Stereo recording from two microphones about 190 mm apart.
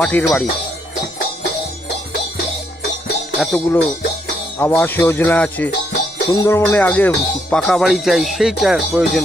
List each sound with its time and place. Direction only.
0.0 s speech: 5° left (ahead or behind)
3.3 s speech: 10° left (ahead or behind)